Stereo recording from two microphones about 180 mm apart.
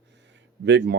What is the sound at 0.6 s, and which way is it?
Speech, 75° right (ahead or behind).